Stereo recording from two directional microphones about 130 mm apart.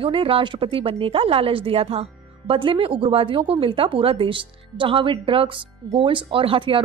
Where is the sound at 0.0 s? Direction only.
45° right (ahead or behind).